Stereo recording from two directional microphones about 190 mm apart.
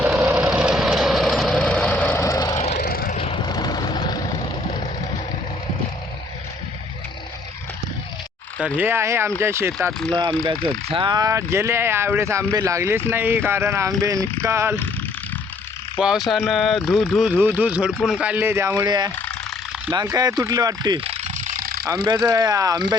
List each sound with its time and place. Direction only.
0.0 s vehicle: 15° right (ahead or behind); by 2.6 s 20° left (ahead or behind)
2.6 s vehicle: 40° left (ahead or behind)
2.8 s vehicle: 50° left (ahead or behind)
3.2 s vehicle: 25° left (ahead or behind)
8.6 s speech: 10° right (ahead or behind)
10.8 s speech: 25° right (ahead or behind)
16.0 s speech: 5° right (ahead or behind); by 19.1 s 20° right (ahead or behind)
19.1 s a sound: 5° left (ahead or behind)
19.9 s speech: 20° right (ahead or behind)
20.4 s ratchet: 20° right (ahead or behind); by 21.8 s 50° right (ahead or behind)
22.0 s speech: 20° right (ahead or behind)